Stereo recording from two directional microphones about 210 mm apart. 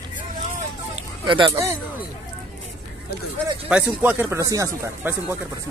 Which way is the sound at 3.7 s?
5° right (ahead or behind).